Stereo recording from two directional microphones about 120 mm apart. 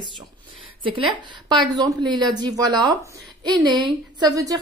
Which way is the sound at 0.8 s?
45° right (ahead or behind).